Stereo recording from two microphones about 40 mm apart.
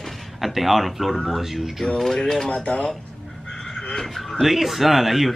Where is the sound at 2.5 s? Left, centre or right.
Left.